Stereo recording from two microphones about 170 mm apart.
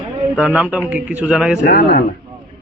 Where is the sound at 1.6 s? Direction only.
75° left (ahead or behind).